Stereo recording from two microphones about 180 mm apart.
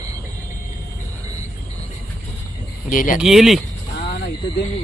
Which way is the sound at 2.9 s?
45° left (ahead or behind).